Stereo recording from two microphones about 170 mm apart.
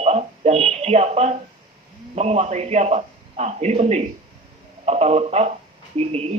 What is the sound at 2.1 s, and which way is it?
Speech, 40° right (ahead or behind).